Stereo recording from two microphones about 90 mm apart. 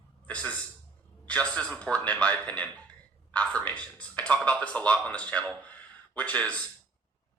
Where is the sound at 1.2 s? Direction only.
15° left (ahead or behind).